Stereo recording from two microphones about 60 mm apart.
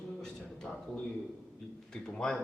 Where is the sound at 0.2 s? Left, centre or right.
Centre.